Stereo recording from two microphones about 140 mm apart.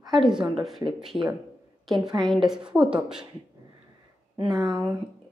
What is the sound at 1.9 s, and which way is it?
Speech, 30° right (ahead or behind).